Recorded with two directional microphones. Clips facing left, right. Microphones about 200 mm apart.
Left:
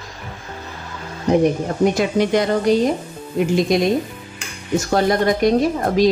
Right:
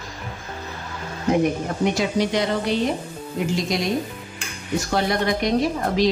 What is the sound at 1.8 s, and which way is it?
A woman's voice, 50° left (ahead or behind).